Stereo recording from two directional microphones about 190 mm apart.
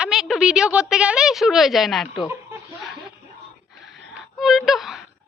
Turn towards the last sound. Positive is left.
turn(degrees=0)  # may be behind; listen again after turning